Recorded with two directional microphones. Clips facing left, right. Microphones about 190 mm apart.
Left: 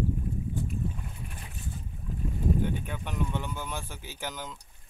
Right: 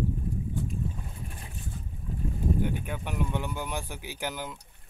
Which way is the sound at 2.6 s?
10° right (ahead or behind).